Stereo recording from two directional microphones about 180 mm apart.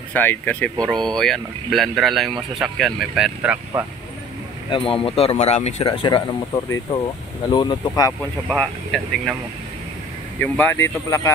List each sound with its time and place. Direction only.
0.1 s speech: 10° left (ahead or behind)
4.6 s a man's voice: 30° left (ahead or behind)
8.5 s speech: centre (ahead or behind)
10.4 s speech: 10° left (ahead or behind)